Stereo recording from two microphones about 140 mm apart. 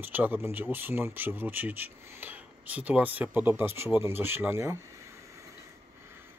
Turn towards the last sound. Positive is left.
turn(degrees=-20)  # may be behind; listen again after turning